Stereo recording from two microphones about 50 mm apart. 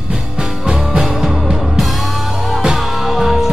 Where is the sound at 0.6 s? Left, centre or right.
Centre.